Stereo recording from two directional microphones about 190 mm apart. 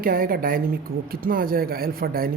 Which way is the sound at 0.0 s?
50° right (ahead or behind).